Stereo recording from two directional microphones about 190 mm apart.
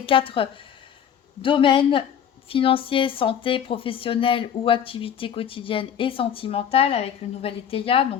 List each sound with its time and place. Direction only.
0.0 s speech: 30° left (ahead or behind)